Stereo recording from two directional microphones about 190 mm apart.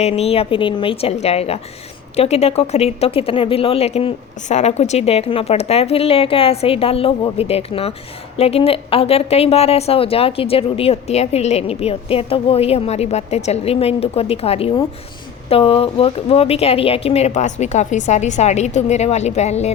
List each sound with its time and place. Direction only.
0.0 s a woman's voice: 30° left (ahead or behind)